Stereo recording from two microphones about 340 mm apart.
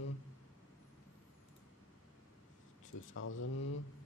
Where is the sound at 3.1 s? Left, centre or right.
Left.